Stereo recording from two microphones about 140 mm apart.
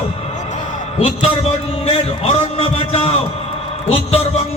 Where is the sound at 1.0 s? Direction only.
45° left (ahead or behind).